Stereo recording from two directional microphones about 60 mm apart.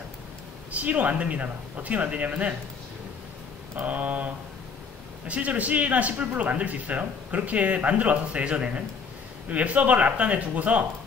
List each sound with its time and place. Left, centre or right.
0.7 s a man's voice: right
3.7 s a man's voice: right
5.3 s a man's voice: right